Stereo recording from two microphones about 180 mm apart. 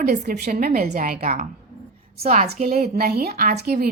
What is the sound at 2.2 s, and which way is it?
Speech, 35° right (ahead or behind).